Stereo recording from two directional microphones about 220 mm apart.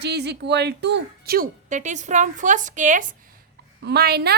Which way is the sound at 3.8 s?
45° right (ahead or behind).